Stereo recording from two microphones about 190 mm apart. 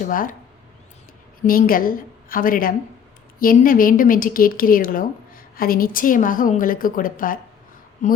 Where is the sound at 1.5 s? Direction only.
50° left (ahead or behind).